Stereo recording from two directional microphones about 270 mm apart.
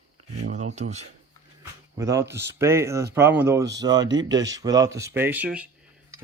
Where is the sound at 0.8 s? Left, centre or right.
Right.